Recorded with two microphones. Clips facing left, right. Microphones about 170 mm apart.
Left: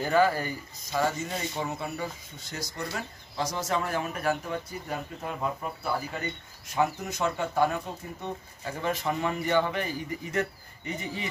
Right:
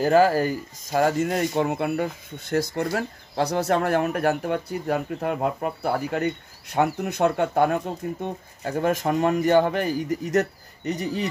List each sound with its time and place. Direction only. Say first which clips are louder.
0.0 s speech: right 6 dB; 40° right (ahead or behind)